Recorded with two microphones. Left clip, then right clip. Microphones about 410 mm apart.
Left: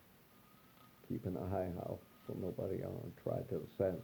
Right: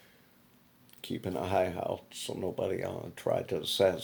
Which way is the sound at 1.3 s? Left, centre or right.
Right.